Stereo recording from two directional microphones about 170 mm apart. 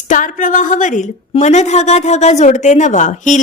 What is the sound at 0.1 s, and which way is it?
A woman's voice, 50° left (ahead or behind).